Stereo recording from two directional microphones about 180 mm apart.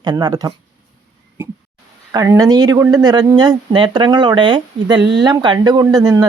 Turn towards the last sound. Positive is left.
turn(degrees=-20)  # may be behind; listen again after turning